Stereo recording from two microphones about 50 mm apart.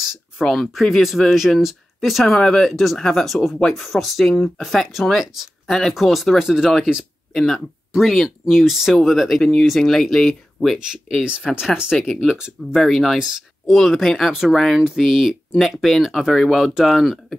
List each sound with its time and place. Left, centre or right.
0.4 s speech: centre
2.2 s speech: centre
5.7 s speech: centre
6.3 s speech: centre
7.3 s speech: centre
10.9 s speech: centre
11.3 s speech: right
12.0 s speech: centre
12.4 s speech: centre
12.8 s speech: centre